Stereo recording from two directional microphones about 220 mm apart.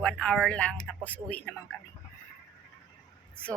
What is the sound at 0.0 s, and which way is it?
Speech, 5° left (ahead or behind).